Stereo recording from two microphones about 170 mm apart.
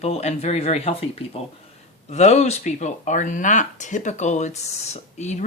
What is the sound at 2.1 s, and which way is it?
Speech, 40° left (ahead or behind).